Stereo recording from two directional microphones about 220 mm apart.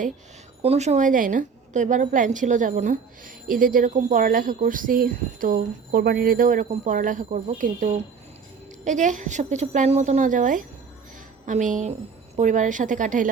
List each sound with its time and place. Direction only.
0.6 s a woman's voice: 30° right (ahead or behind)